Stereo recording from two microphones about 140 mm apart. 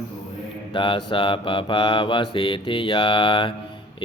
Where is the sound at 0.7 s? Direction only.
35° left (ahead or behind).